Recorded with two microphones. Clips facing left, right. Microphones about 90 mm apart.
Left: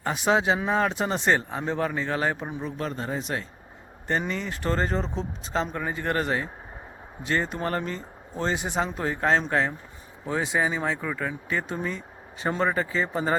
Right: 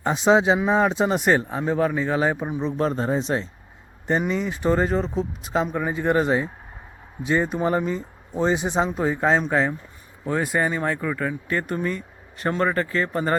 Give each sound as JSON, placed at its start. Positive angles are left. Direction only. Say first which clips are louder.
{"t": 0.0, "sound": "speech", "louder": "right 5 dB", "side_deg": -20}
{"t": 2.6, "sound": "speech", "louder": "right 9 dB", "side_deg": -35}
{"t": 4.0, "sound": "speech", "louder": "right 5 dB", "side_deg": -15}
{"t": 4.9, "sound": "speech", "louder": "right 5 dB", "side_deg": -5}